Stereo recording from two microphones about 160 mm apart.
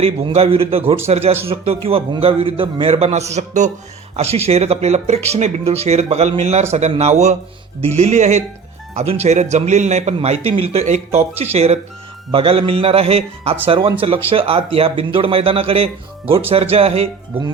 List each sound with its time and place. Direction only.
0.0 s a man's voice: 35° right (ahead or behind)